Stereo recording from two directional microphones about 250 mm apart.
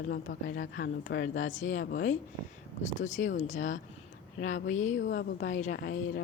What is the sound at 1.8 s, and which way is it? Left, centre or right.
Speech, left.